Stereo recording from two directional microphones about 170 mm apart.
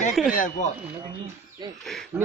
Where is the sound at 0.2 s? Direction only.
Centre (ahead or behind).